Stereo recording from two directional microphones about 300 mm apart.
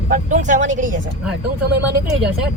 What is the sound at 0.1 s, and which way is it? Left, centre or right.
Speech, right.